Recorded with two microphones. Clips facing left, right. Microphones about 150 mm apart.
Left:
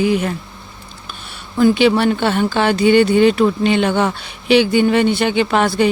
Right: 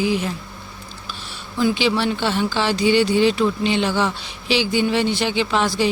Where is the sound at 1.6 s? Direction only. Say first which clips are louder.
Left 7 dB; 55° left (ahead or behind).